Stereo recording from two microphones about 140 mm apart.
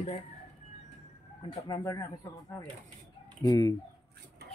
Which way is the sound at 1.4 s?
30° left (ahead or behind).